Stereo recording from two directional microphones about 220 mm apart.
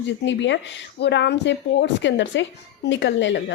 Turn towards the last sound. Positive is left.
turn(degrees=55)  # may be behind; listen again after turning